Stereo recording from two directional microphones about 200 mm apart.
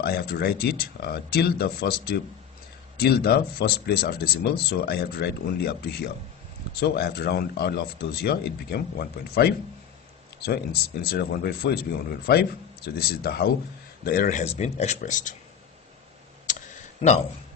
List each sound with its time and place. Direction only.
0.0 s speech: 50° left (ahead or behind)
14.4 s speech: 35° left (ahead or behind)
16.4 s tick: 40° left (ahead or behind)